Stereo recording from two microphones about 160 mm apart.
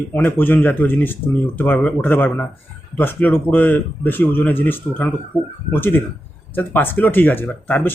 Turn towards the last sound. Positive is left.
turn(degrees=10)  # may be behind; listen again after turning